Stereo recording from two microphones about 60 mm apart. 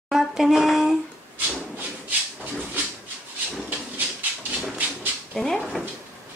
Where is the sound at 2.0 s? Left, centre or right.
Right.